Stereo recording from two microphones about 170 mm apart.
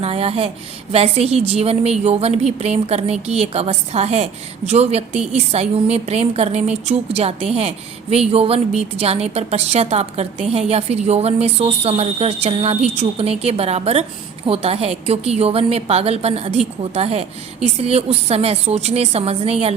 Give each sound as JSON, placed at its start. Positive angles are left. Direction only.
{"t": 0.0, "sound": "a woman's voice", "side_deg": -35}